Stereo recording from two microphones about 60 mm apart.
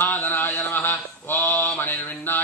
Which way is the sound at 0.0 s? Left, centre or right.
Left.